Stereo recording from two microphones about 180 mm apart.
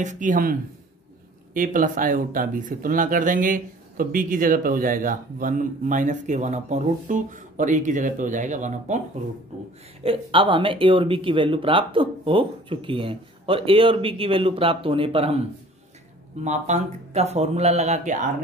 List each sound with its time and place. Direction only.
0.0 s speech: 45° right (ahead or behind)
10.0 s speech: 30° right (ahead or behind)
16.4 s speech: 40° right (ahead or behind)